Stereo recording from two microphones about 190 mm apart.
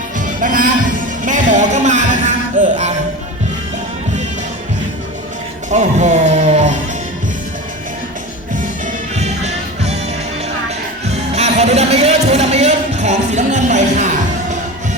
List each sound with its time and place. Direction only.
0.4 s music: 45° right (ahead or behind)
5.7 s music: 40° right (ahead or behind)
9.1 s music: 35° right (ahead or behind)
11.0 s music: 35° right (ahead or behind)